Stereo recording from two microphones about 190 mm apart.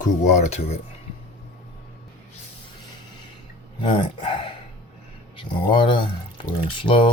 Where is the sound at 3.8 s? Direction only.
25° left (ahead or behind).